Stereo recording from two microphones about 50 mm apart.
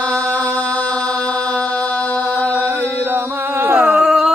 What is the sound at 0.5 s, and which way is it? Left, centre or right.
Chant, left.